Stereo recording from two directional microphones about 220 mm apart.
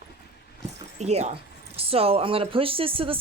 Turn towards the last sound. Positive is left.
turn(degrees=-25)  # may be behind; listen again after turning